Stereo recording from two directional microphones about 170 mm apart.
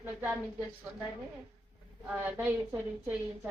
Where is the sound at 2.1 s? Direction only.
10° right (ahead or behind).